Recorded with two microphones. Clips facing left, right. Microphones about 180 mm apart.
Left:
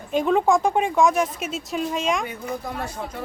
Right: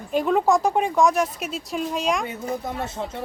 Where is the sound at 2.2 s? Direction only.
25° right (ahead or behind).